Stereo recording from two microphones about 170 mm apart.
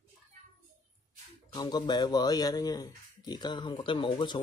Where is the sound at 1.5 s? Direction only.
25° left (ahead or behind).